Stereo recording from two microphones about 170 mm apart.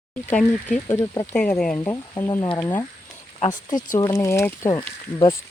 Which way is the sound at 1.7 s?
15° left (ahead or behind).